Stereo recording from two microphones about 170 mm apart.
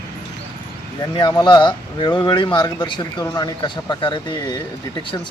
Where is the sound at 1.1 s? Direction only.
25° left (ahead or behind).